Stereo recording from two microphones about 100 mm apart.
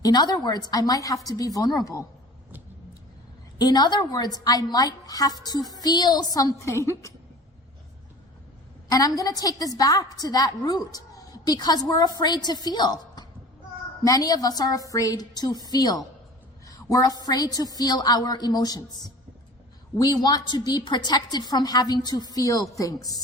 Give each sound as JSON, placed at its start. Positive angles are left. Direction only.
{"t": 0.0, "sound": "a woman's voice", "side_deg": 45}
{"t": 3.6, "sound": "a woman's voice", "side_deg": 45}
{"t": 8.9, "sound": "a woman's voice", "side_deg": 40}
{"t": 16.6, "sound": "a sound", "side_deg": 35}
{"t": 17.2, "sound": "a woman's voice", "side_deg": 40}